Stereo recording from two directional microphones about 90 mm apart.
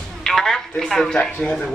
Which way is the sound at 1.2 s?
15° left (ahead or behind).